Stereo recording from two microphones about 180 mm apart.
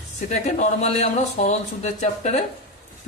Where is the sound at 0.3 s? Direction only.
40° left (ahead or behind).